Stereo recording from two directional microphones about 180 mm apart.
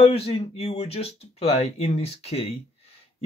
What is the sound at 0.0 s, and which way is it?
Speech, 35° left (ahead or behind).